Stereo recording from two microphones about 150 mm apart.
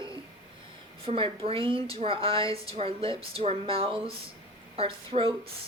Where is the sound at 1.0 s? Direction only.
40° right (ahead or behind).